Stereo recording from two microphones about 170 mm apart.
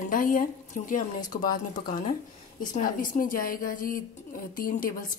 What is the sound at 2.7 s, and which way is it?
Speech, 50° left (ahead or behind).